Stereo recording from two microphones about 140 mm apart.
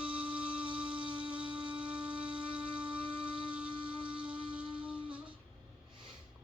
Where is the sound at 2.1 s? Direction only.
10° right (ahead or behind).